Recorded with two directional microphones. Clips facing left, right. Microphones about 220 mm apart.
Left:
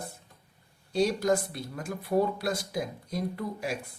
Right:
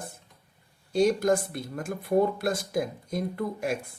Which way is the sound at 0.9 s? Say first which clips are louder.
Right 3 dB; 50° right (ahead or behind).